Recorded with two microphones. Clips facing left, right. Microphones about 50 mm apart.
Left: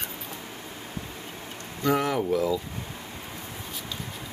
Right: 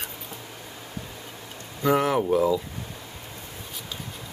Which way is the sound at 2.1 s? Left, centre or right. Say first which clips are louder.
Right 3 dB; centre.